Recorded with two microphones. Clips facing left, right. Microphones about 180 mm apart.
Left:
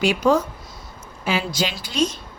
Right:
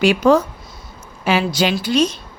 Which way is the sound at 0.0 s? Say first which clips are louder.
Right 5 dB; 70° right (ahead or behind).